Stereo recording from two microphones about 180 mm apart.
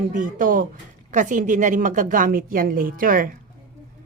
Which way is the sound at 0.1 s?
50° right (ahead or behind).